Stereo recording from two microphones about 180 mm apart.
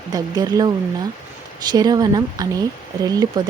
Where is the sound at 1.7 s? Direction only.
20° right (ahead or behind).